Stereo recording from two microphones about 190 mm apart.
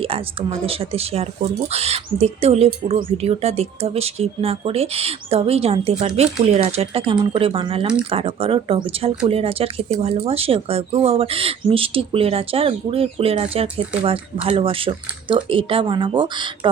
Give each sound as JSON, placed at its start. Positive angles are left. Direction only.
{"t": 0.0, "sound": "speech", "side_deg": -30}